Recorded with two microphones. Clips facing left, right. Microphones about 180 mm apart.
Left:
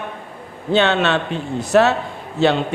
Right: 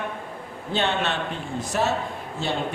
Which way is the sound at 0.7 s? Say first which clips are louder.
Left 8 dB; 90° left.